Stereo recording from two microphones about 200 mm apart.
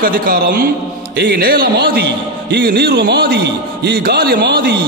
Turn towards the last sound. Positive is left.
turn(degrees=-55)  # may be behind; listen again after turning